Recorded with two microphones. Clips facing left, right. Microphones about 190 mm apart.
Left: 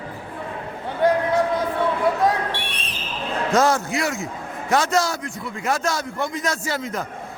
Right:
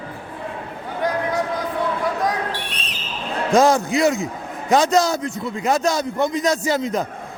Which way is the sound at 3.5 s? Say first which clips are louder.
Right 4 dB; 15° right (ahead or behind).